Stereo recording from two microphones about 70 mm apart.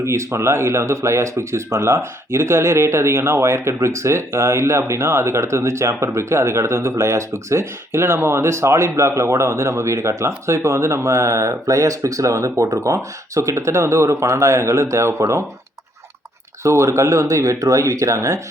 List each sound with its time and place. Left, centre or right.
0.0 s speech: right
16.6 s speech: right